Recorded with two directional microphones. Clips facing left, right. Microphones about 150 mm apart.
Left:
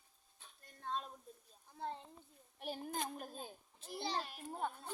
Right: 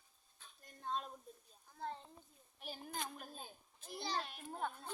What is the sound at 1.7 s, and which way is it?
Speech, 20° left (ahead or behind).